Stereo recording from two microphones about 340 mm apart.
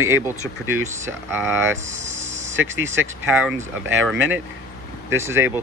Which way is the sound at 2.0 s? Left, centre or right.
Right.